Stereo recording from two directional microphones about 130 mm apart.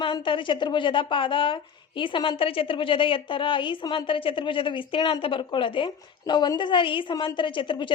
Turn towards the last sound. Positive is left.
turn(degrees=40)  # may be behind; listen again after turning